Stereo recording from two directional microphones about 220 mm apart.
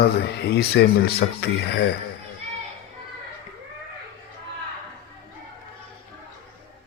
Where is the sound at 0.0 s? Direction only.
45° left (ahead or behind).